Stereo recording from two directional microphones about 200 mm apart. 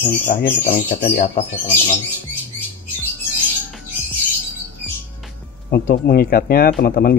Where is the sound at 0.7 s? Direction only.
45° left (ahead or behind).